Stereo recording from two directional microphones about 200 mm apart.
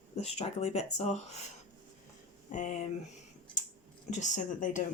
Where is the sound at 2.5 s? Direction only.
40° left (ahead or behind).